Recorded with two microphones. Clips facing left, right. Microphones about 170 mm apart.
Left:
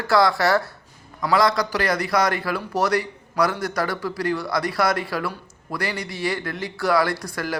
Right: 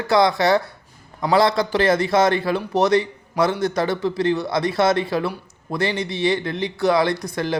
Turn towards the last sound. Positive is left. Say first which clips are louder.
# right 4 dB
turn(degrees=-20)  # may be behind; listen again after turning